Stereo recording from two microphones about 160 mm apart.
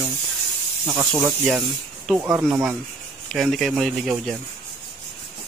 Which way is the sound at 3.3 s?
Centre (ahead or behind).